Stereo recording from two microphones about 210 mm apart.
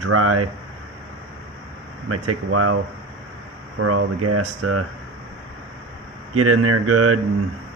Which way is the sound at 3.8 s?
90° right.